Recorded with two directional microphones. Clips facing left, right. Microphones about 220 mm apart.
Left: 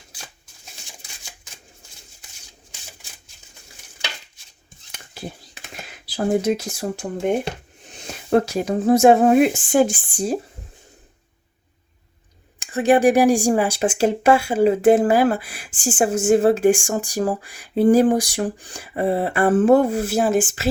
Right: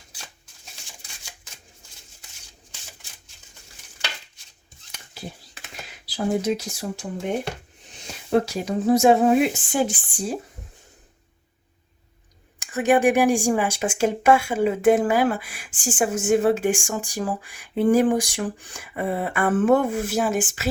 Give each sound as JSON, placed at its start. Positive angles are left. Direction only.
{"t": 5.9, "sound": "speech", "side_deg": 50}
{"t": 8.0, "sound": "speech", "side_deg": 50}
{"t": 12.5, "sound": "a sound", "side_deg": 30}